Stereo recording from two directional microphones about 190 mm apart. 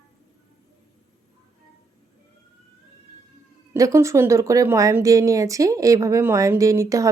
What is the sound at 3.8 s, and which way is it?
A woman's voice, 15° right (ahead or behind).